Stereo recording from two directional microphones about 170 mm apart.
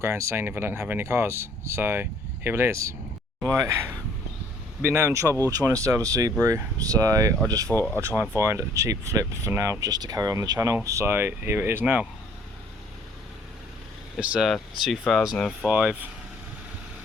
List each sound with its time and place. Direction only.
0.0 s speech: 15° right (ahead or behind)
14.2 s speech: centre (ahead or behind)